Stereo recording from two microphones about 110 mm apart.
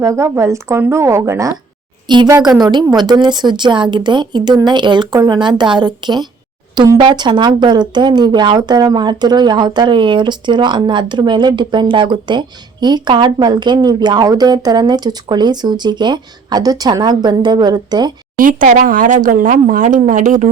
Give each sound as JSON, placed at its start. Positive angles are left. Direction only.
{"t": 0.0, "sound": "a woman's voice", "side_deg": -30}
{"t": 20.0, "sound": "speech", "side_deg": -90}